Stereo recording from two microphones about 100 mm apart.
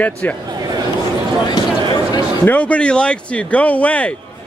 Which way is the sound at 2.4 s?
15° left (ahead or behind).